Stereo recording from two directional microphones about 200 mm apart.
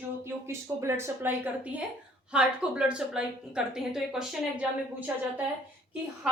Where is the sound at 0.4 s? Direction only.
15° right (ahead or behind).